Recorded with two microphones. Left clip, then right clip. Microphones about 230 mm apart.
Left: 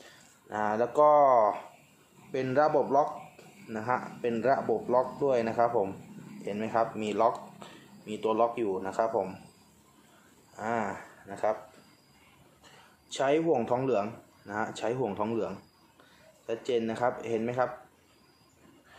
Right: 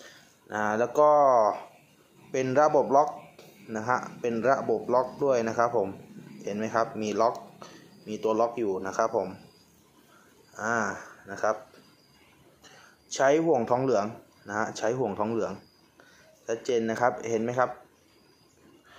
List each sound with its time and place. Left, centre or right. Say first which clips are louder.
0.5 s speech: right 2 dB; centre
10.5 s speech: right 3 dB; centre
13.1 s speech: right 4 dB; centre